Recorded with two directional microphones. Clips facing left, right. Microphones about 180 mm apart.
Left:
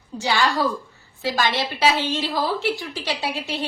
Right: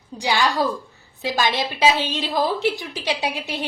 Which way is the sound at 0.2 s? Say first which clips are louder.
Even; 15° right (ahead or behind).